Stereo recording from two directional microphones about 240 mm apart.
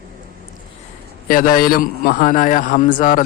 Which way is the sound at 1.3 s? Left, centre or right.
Left.